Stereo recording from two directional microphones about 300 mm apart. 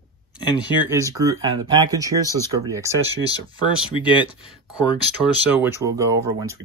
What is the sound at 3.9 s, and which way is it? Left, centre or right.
Speech, centre.